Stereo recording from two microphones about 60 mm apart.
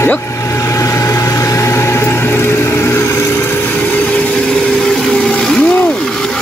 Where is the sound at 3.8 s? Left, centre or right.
Left.